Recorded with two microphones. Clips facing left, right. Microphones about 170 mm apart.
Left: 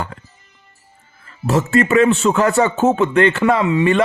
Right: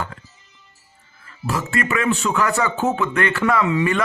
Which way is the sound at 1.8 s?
25° left (ahead or behind).